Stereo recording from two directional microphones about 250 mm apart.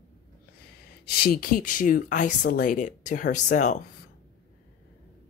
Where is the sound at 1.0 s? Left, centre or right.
Left.